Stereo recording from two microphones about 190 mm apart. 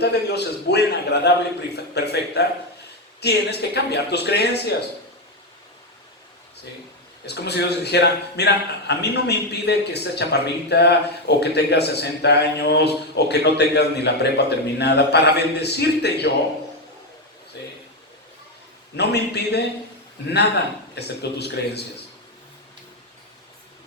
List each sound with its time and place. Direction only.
0.0 s a man's voice: 60° left (ahead or behind)
7.3 s a man's voice: 60° left (ahead or behind)
18.9 s a man's voice: 60° left (ahead or behind)